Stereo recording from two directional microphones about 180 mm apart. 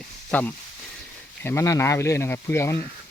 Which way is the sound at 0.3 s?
10° left (ahead or behind).